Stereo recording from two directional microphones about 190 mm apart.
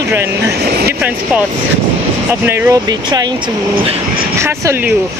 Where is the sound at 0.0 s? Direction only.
15° right (ahead or behind).